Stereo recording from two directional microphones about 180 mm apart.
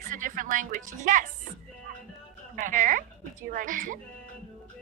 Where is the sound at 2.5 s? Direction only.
45° right (ahead or behind).